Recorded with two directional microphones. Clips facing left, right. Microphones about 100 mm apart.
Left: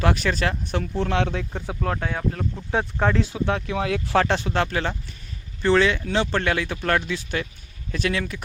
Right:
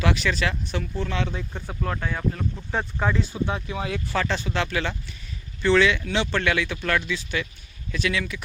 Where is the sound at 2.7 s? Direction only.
70° left (ahead or behind).